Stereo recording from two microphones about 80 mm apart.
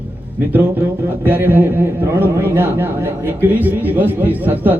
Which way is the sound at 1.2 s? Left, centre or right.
Right.